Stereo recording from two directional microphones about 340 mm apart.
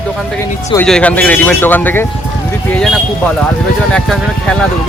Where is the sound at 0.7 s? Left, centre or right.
Centre.